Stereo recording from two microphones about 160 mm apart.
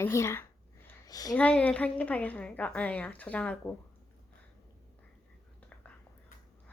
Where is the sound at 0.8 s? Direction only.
20° left (ahead or behind).